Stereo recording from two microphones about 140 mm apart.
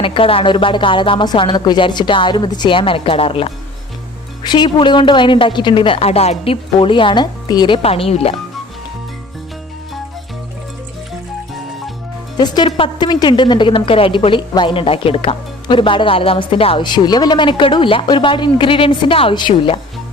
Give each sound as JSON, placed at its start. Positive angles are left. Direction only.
{"t": 0.0, "sound": "a woman's voice", "side_deg": 40}
{"t": 12.4, "sound": "a woman's voice", "side_deg": 35}